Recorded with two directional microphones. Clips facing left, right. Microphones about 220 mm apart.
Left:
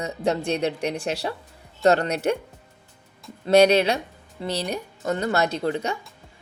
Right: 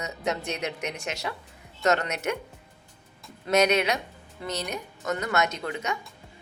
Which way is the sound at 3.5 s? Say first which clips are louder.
Left 6 dB; 30° left (ahead or behind).